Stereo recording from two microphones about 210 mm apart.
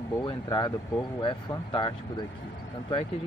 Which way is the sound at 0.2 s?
20° left (ahead or behind).